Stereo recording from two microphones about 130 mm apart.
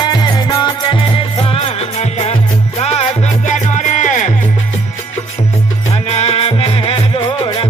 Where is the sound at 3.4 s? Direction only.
70° left (ahead or behind).